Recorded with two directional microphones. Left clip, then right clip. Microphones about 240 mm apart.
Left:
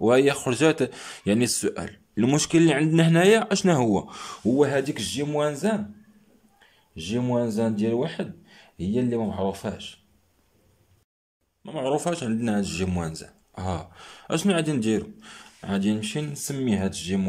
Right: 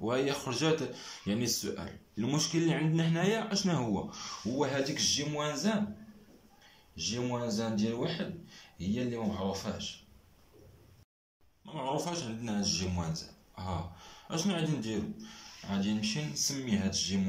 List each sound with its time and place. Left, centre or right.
0.0 s speech: left
7.0 s speech: left
11.6 s speech: left